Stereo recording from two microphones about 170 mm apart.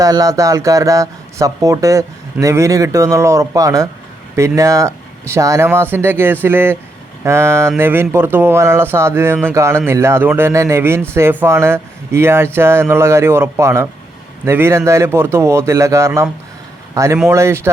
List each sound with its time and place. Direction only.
0.0 s a man's voice: 20° right (ahead or behind)